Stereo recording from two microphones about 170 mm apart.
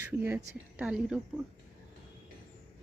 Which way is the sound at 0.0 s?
15° right (ahead or behind).